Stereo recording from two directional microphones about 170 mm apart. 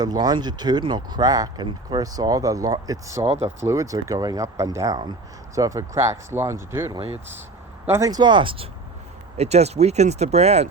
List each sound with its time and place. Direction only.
0.0 s speech: 25° right (ahead or behind)
3.2 s speech: 40° right (ahead or behind)
3.6 s speech: 15° right (ahead or behind); by 10.7 s 40° right (ahead or behind)